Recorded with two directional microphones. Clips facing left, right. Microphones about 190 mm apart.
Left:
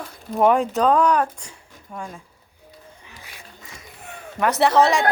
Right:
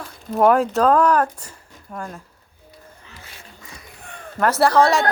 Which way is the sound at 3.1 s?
15° left (ahead or behind).